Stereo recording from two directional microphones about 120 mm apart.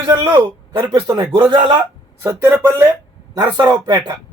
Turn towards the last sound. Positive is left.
turn(degrees=-35)  # may be behind; listen again after turning